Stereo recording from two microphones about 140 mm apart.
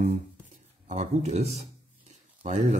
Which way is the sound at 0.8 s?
55° right (ahead or behind).